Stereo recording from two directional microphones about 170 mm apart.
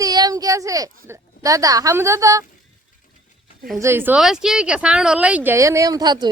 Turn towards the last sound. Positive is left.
turn(degrees=-25)  # may be behind; listen again after turning